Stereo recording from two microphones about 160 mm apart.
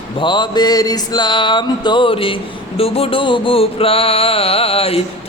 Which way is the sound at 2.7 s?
35° left (ahead or behind).